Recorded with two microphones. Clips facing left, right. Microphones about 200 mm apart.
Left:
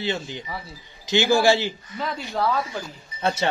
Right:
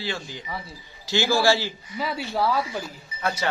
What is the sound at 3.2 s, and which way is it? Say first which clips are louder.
Speech: left 4 dB; 25° left (ahead or behind).